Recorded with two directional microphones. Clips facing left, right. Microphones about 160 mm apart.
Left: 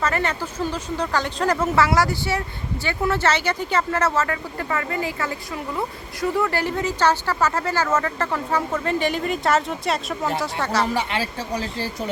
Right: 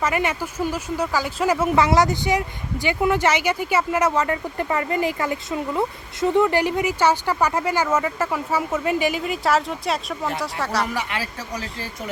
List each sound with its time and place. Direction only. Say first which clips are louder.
0.0 s speech: right 1 dB; 10° right (ahead or behind)
10.8 s speech: left 3 dB; 30° left (ahead or behind)